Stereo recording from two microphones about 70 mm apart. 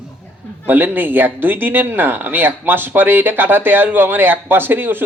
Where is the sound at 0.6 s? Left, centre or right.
Right.